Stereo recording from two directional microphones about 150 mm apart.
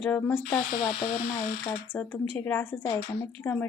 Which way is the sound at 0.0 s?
10° left (ahead or behind).